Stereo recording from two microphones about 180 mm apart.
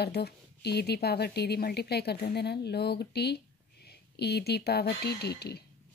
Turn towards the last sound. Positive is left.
turn(degrees=65)  # may be behind; listen again after turning